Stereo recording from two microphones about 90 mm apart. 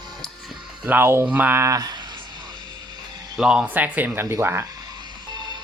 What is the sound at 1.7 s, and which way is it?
Speech, 40° right (ahead or behind).